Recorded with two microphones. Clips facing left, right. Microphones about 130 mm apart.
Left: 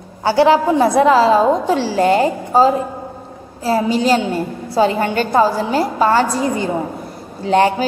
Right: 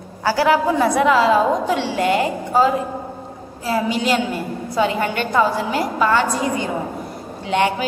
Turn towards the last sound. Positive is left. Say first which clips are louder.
# left 5 dB
turn(degrees=35)  # may be behind; listen again after turning